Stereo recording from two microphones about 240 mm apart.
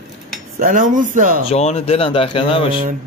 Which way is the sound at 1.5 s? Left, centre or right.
Left.